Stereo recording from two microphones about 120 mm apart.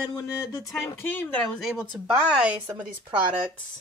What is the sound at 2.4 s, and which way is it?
Speech, 15° right (ahead or behind).